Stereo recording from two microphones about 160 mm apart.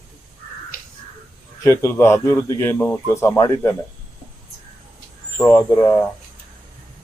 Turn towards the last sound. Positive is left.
turn(degrees=15)  # may be behind; listen again after turning